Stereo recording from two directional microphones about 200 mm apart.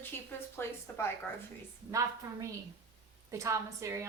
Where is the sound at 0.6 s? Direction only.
10° left (ahead or behind).